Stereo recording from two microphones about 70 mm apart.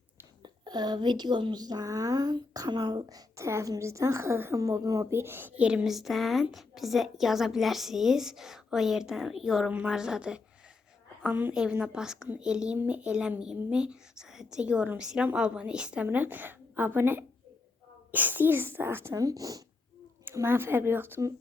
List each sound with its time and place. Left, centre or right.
0.4 s speech: right
3.3 s a woman's voice: right
4.5 s a woman's voice: right
5.1 s a child's voice: right
5.6 s a woman's voice: centre
11.2 s speech: right
11.5 s speech: centre
16.0 s a child's voice: right
19.1 s speech: right
20.3 s a child's voice: right